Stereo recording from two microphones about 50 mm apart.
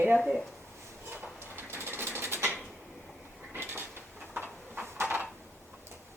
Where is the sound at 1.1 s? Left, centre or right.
Right.